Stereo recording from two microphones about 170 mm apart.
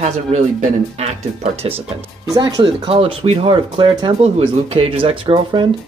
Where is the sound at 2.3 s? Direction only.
20° right (ahead or behind).